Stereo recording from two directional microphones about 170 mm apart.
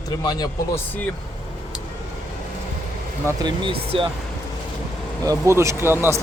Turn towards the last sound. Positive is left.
turn(degrees=-15)  # may be behind; listen again after turning